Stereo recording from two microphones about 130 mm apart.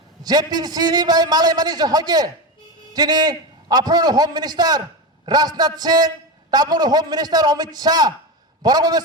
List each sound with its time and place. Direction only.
0.2 s a man's voice: 30° right (ahead or behind)